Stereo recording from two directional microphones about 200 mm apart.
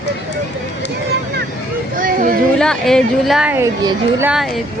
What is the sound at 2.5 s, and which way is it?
Speech, 5° left (ahead or behind).